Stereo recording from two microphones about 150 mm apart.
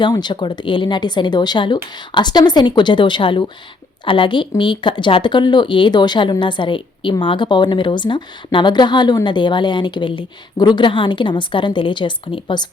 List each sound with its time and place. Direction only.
0.0 s speech: 30° left (ahead or behind)